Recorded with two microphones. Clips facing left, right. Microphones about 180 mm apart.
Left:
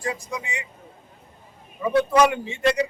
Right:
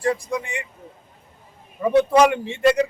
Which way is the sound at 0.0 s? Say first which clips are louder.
Right 7 dB; 60° right (ahead or behind).